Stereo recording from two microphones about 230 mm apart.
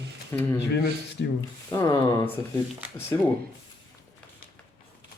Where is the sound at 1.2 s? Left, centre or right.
Left.